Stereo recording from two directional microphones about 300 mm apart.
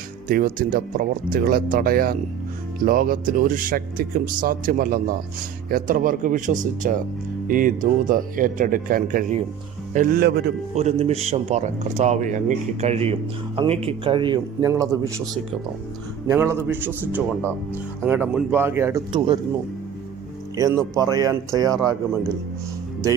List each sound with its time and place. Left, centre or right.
0.3 s a man's voice: right; by 15.2 s centre
16.2 s a man's voice: centre
20.6 s a man's voice: centre